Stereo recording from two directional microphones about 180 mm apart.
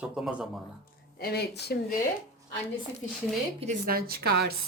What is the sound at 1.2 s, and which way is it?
Speech, 60° left (ahead or behind).